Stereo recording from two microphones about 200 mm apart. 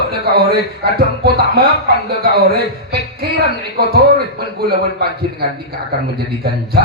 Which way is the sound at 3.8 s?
50° right (ahead or behind).